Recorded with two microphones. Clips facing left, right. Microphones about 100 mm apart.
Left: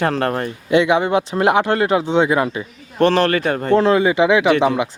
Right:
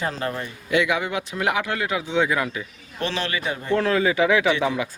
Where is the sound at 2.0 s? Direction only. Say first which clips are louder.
Left 6 dB; 30° left (ahead or behind).